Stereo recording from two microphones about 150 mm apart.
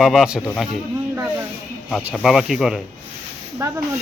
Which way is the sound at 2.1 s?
Centre (ahead or behind).